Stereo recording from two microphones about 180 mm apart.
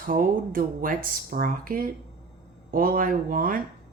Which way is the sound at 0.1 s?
50° right (ahead or behind).